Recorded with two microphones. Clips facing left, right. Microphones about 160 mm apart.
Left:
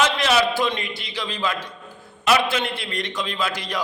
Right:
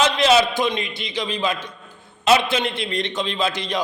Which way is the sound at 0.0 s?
20° right (ahead or behind).